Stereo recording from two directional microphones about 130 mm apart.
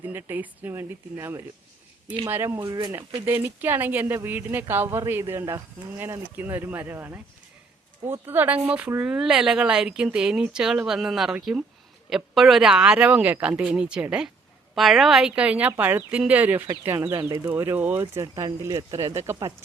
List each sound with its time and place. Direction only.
0.0 s speech: 15° right (ahead or behind)
17.2 s speech: 30° right (ahead or behind)
17.4 s speech: 15° right (ahead or behind)